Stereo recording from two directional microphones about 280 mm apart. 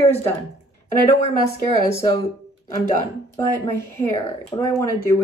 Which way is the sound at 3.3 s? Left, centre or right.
Centre.